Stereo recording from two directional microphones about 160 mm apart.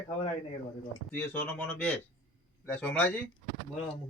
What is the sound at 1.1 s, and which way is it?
Speech, 10° left (ahead or behind).